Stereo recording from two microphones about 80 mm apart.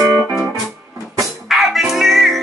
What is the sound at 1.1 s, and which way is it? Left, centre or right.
Music, centre.